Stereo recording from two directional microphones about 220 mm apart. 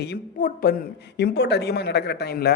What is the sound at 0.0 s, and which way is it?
A woman's voice, 45° left (ahead or behind).